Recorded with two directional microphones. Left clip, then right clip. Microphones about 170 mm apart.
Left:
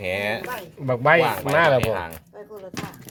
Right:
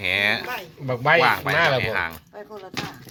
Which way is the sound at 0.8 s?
65° left (ahead or behind).